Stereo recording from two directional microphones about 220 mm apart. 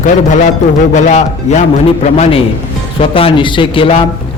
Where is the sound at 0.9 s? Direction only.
35° left (ahead or behind).